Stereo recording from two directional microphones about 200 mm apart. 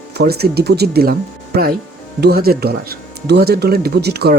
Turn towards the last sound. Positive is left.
turn(degrees=-55)  # may be behind; listen again after turning